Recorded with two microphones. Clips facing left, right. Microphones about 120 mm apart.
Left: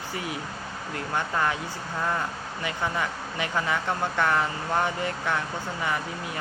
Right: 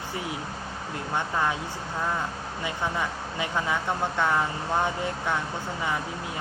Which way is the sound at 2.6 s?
20° right (ahead or behind).